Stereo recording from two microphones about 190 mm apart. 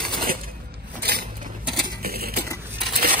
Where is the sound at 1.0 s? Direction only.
55° right (ahead or behind).